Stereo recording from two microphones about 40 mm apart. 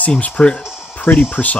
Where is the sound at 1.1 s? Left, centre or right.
Left.